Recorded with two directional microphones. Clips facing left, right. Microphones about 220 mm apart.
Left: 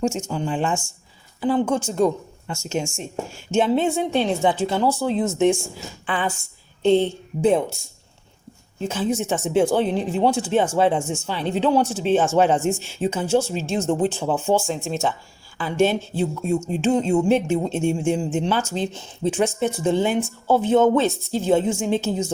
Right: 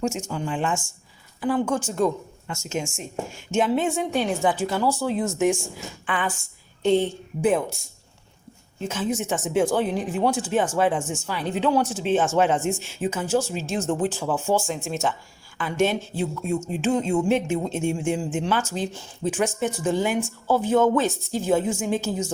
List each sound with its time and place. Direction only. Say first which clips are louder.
0.0 s a woman's voice: left 3 dB; 30° left (ahead or behind)
8.9 s a woman's voice: left 3 dB; 30° left (ahead or behind)